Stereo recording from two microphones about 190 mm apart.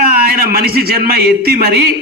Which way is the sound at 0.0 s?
55° right (ahead or behind).